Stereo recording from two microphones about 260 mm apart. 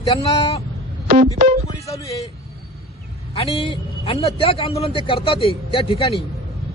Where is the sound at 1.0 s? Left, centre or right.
Right.